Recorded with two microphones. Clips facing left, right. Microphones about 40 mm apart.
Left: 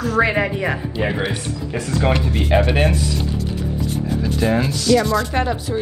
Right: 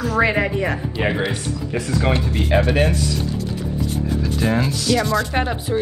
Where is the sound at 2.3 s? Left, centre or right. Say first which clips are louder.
Even; centre.